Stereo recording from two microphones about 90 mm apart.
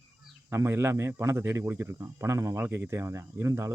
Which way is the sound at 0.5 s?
30° right (ahead or behind).